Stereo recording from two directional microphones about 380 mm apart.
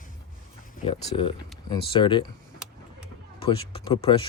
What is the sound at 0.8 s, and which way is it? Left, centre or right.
Speech, centre.